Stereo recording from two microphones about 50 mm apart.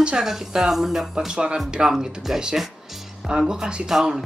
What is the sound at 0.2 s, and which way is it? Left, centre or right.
Speech, centre.